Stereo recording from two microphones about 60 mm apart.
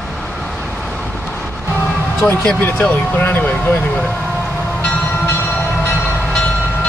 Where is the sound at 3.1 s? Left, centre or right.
Left.